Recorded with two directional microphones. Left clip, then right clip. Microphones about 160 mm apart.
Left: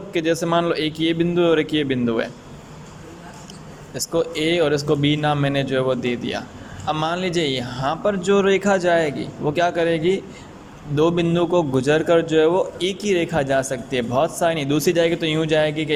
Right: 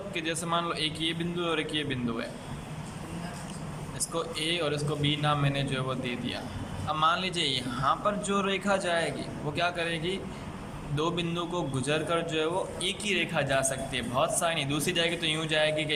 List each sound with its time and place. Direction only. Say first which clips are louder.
0.1 s a man's voice: left 11 dB; 35° left (ahead or behind)
3.9 s a man's voice: left 11 dB; 35° left (ahead or behind)